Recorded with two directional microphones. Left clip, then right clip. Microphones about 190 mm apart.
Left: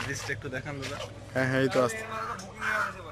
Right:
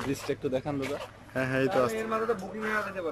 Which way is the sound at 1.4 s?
Centre (ahead or behind).